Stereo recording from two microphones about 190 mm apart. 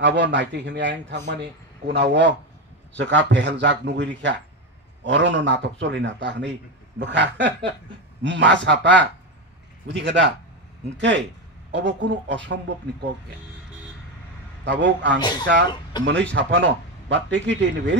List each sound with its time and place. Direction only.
0.0 s a man's voice: 70° right (ahead or behind)
14.6 s a man's voice: 70° right (ahead or behind)
15.1 s speech: 20° left (ahead or behind)
16.3 s a man's voice: 70° right (ahead or behind)